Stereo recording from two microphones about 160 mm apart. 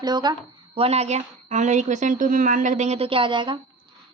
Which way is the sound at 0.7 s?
40° right (ahead or behind).